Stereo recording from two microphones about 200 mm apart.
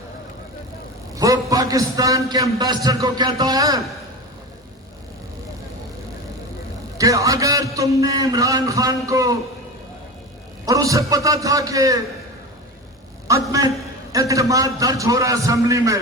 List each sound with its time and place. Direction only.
1.1 s a man's voice: 15° right (ahead or behind)
7.0 s a man's voice: 15° right (ahead or behind)
10.7 s a man's voice: 15° right (ahead or behind)
13.3 s a man's voice: 15° right (ahead or behind)